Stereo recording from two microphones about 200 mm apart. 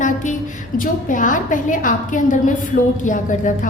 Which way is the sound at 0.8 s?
40° left (ahead or behind).